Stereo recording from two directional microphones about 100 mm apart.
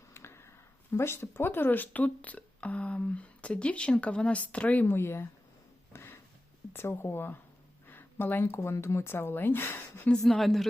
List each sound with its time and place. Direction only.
0.1 s speech: 25° left (ahead or behind)
5.9 s a sound: 25° left (ahead or behind)
6.7 s speech: 25° left (ahead or behind)
10.1 s speech: centre (ahead or behind)